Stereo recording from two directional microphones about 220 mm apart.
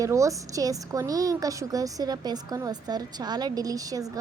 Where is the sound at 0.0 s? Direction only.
15° right (ahead or behind).